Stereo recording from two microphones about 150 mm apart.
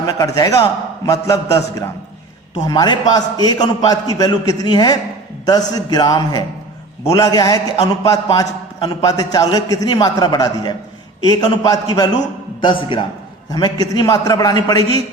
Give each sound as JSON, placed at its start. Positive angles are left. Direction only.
{"t": 0.0, "sound": "a man's voice", "side_deg": 20}